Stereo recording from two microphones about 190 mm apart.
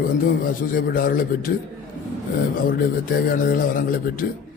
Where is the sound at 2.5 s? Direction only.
50° left (ahead or behind).